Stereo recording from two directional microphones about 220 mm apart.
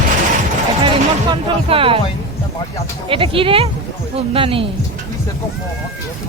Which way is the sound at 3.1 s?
25° right (ahead or behind).